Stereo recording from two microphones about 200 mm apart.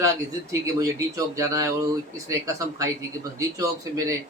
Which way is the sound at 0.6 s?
15° right (ahead or behind).